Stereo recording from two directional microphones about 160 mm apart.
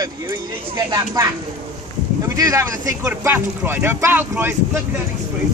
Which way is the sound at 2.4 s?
20° right (ahead or behind).